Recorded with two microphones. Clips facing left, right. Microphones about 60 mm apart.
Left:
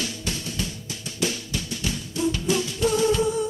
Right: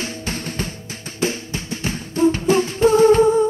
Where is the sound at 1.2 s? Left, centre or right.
Right.